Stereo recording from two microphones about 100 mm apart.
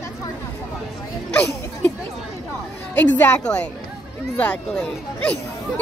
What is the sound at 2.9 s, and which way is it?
Speech, 15° left (ahead or behind).